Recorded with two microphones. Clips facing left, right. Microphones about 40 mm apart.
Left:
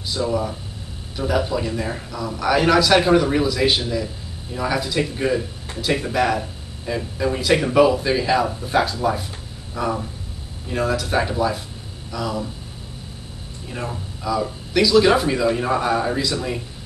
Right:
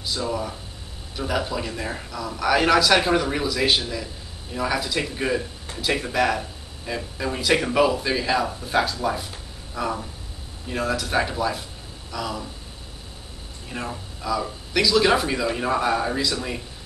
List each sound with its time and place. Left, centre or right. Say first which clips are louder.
0.1 s a man's voice: left 5 dB; centre
13.7 s a man's voice: left 2 dB; centre